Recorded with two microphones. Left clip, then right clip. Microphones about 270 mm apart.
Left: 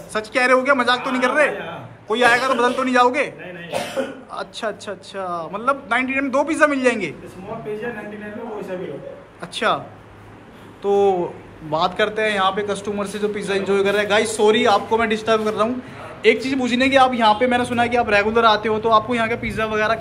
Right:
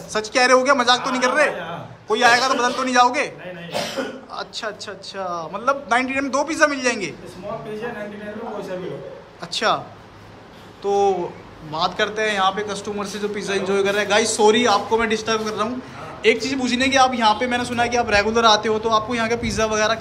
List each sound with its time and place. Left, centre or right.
0.1 s a man's voice: centre
4.4 s a man's voice: centre
10.8 s a man's voice: centre